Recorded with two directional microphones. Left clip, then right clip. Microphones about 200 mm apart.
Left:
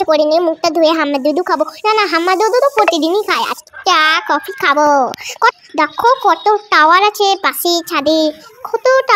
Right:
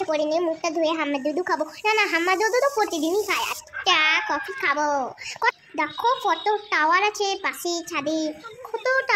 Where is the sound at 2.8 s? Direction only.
45° left (ahead or behind).